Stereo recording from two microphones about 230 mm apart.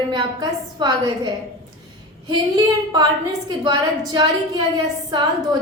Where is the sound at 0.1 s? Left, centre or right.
Centre.